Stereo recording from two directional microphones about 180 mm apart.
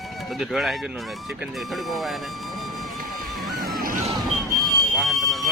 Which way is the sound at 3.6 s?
55° right (ahead or behind).